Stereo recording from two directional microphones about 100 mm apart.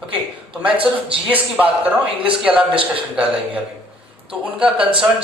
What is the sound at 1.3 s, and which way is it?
Speech, 15° right (ahead or behind).